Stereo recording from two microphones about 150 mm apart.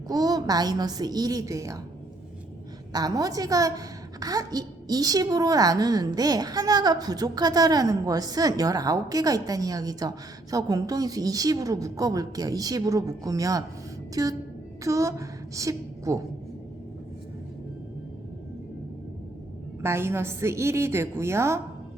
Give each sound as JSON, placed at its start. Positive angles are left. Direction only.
{"t": 0.1, "sound": "a woman's voice", "side_deg": -25}
{"t": 2.9, "sound": "a woman's voice", "side_deg": -25}
{"t": 19.8, "sound": "a woman's voice", "side_deg": -15}